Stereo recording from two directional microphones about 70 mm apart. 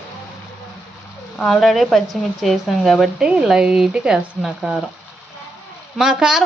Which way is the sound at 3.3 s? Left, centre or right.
Centre.